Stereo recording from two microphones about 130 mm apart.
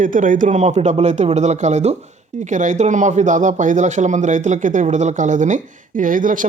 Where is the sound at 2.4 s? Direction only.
75° right (ahead or behind).